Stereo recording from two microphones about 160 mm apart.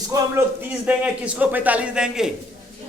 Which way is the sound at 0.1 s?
20° right (ahead or behind).